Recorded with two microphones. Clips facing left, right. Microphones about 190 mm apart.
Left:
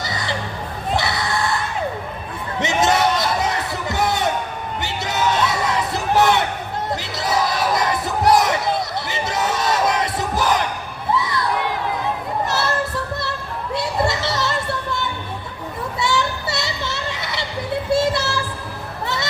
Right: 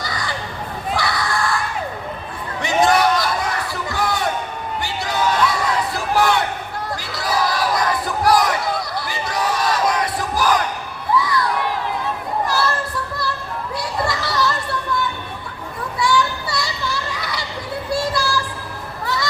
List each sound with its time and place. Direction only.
0.0 s a sound: 25° left (ahead or behind)
4.8 s crowd: 20° left (ahead or behind)
7.0 s battle cry: 20° left (ahead or behind)
11.1 s a sound: 25° left (ahead or behind)
13.7 s children playing: 25° left (ahead or behind)
17.9 s child singing: 25° left (ahead or behind)